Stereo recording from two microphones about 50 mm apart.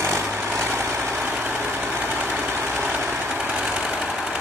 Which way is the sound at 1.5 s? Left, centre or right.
Right.